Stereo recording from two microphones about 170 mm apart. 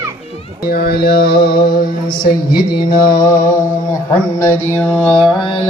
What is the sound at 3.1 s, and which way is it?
Mantra, 20° left (ahead or behind).